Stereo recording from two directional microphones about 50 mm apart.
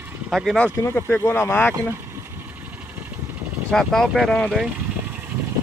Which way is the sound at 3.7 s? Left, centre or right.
Centre.